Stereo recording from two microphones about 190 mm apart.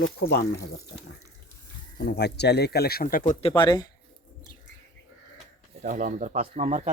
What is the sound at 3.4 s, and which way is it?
Speech, 25° left (ahead or behind).